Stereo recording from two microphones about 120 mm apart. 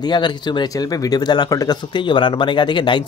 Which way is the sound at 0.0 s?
40° left (ahead or behind).